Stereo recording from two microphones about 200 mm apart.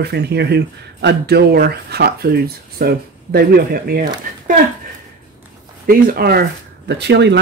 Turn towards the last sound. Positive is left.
turn(degrees=-60)  # may be behind; listen again after turning